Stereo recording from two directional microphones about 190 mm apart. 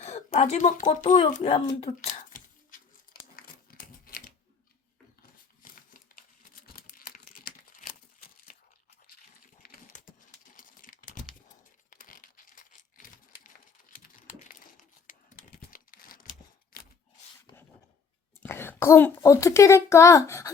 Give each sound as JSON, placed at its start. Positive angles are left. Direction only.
{"t": 0.3, "sound": "speech", "side_deg": 35}
{"t": 1.8, "sound": "a sound", "side_deg": 35}
{"t": 3.3, "sound": "crumpling", "side_deg": 50}
{"t": 5.6, "sound": "crumpling", "side_deg": 45}
{"t": 9.6, "sound": "dog", "side_deg": 45}
{"t": 10.6, "sound": "crumpling", "side_deg": 45}
{"t": 18.4, "sound": "a child's voice", "side_deg": 10}